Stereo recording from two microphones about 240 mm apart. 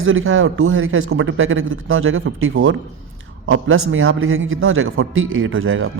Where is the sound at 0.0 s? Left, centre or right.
Right.